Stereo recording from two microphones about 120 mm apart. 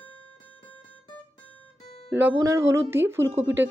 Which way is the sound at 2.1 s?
20° right (ahead or behind).